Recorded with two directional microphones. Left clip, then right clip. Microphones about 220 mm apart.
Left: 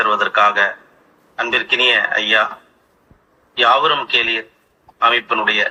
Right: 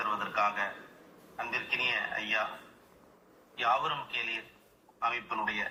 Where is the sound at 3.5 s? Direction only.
50° left (ahead or behind).